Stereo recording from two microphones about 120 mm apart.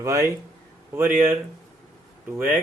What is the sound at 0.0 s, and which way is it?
Speech, 25° right (ahead or behind).